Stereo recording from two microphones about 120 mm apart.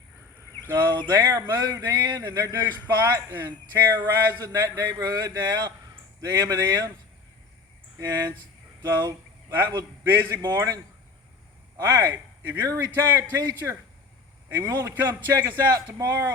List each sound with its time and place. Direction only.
0.7 s speech: 30° right (ahead or behind)
7.9 s speech: 30° right (ahead or behind)
11.9 s speech: 20° right (ahead or behind)
12.6 s speech: 25° right (ahead or behind)